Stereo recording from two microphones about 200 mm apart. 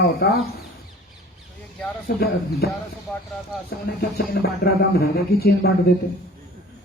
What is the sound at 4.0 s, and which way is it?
A man's voice, 50° left (ahead or behind).